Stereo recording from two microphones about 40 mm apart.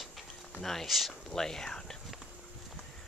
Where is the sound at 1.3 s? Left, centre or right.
Centre.